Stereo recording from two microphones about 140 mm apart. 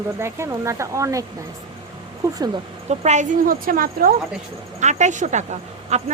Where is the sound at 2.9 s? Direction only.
55° right (ahead or behind); by 4.1 s 90° right.